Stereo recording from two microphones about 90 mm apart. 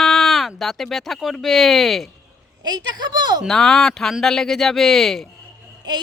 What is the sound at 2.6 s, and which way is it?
Speech, 50° right (ahead or behind).